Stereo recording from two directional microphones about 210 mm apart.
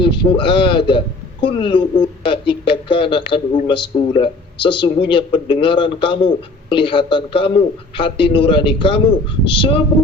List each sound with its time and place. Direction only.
0.0 s speech: 25° left (ahead or behind)